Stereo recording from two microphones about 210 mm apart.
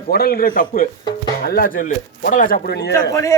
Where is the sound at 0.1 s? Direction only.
45° left (ahead or behind).